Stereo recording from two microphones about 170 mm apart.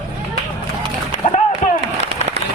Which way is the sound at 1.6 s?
50° left (ahead or behind).